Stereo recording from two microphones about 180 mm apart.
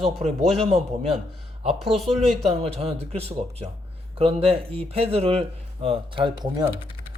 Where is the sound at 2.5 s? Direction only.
35° right (ahead or behind).